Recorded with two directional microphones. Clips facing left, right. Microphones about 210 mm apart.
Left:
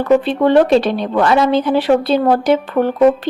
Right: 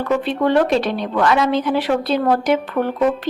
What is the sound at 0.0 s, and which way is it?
Speech, 30° left (ahead or behind).